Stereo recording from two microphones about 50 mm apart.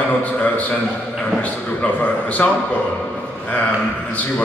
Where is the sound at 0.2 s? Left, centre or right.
Left.